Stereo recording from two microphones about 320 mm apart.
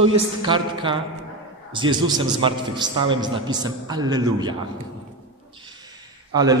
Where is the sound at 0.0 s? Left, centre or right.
Centre.